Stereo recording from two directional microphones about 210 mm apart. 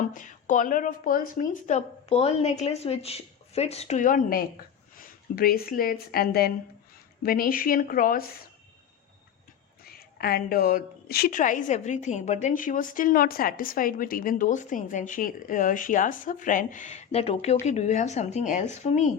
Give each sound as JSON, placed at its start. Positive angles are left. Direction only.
{"t": 0.0, "sound": "a woman's voice", "side_deg": 40}
{"t": 9.9, "sound": "a woman's voice", "side_deg": 45}